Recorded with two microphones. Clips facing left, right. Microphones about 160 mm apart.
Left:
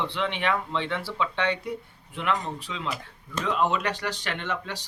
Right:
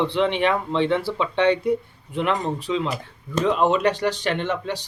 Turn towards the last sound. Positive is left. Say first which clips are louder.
# right 8 dB
turn(degrees=-25)  # may be behind; listen again after turning